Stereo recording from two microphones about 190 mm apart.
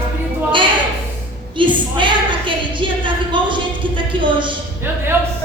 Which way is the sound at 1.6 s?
25° right (ahead or behind).